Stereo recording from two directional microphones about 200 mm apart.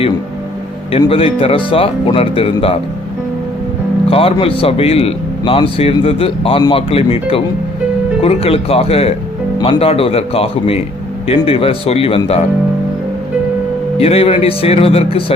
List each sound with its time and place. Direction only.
0.9 s speech: 30° left (ahead or behind)
4.1 s speech: 30° left (ahead or behind)
14.0 s speech: 30° left (ahead or behind)